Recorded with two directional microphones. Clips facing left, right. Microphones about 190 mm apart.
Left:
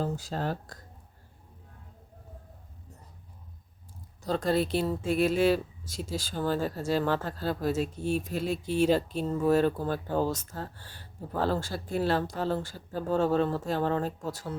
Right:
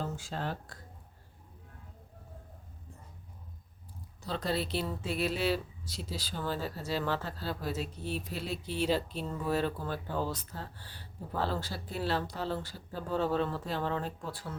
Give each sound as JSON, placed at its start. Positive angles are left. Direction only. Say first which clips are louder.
{"t": 0.0, "sound": "speech", "louder": "left 5 dB", "side_deg": 40}
{"t": 4.3, "sound": "speech", "louder": "left 7 dB", "side_deg": 50}